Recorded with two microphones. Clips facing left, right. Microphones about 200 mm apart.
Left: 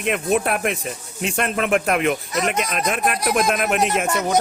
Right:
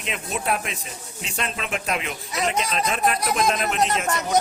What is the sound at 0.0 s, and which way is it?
A man's voice, 55° left (ahead or behind).